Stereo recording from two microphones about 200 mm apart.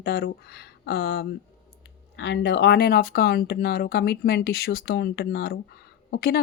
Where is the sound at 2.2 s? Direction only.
60° left (ahead or behind).